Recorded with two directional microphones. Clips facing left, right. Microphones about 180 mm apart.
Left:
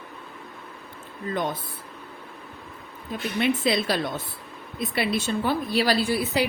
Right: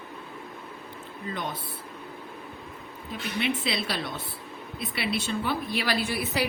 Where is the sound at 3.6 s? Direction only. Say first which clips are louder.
Left 7 dB; 45° left (ahead or behind); by 6.5 s 25° left (ahead or behind).